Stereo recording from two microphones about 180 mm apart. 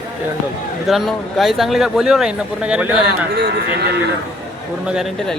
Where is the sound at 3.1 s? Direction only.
65° right (ahead or behind).